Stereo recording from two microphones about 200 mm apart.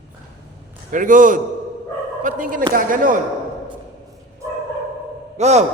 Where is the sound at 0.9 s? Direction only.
40° right (ahead or behind).